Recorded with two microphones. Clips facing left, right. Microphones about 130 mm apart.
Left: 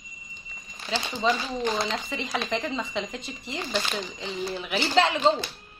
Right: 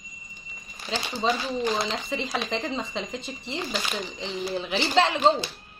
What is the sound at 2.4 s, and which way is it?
A woman's voice, 30° right (ahead or behind).